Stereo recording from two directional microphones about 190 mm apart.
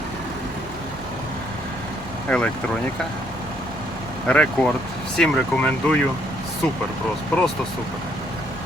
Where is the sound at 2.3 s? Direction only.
5° left (ahead or behind).